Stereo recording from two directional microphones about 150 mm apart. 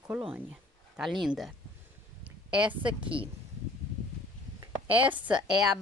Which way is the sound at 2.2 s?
10° right (ahead or behind).